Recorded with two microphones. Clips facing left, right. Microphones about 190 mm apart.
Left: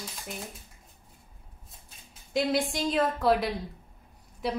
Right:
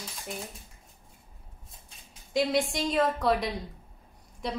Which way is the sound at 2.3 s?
Centre (ahead or behind).